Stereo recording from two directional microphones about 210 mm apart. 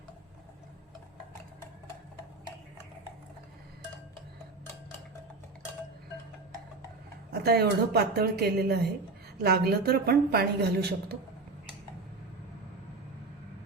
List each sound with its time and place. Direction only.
7.3 s a woman's voice: 50° right (ahead or behind)